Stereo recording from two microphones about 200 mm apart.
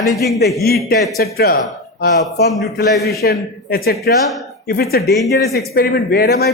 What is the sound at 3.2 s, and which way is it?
A man's voice, 50° left (ahead or behind).